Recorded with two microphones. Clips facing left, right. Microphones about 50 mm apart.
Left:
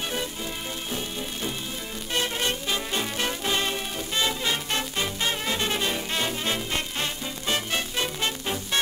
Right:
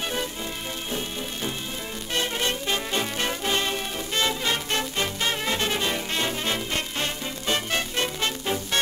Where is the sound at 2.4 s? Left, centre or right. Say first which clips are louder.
Right 1 dB; right.